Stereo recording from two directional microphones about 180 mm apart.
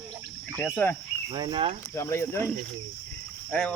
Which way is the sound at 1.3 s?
25° right (ahead or behind).